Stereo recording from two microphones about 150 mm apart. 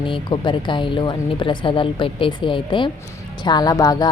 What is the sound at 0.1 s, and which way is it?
Speech, 30° left (ahead or behind).